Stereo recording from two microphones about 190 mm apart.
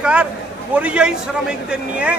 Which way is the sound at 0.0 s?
5° right (ahead or behind).